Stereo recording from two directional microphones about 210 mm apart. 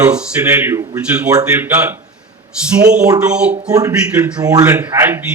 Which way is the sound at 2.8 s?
5° right (ahead or behind).